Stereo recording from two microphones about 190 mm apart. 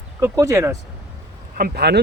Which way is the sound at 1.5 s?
50° right (ahead or behind).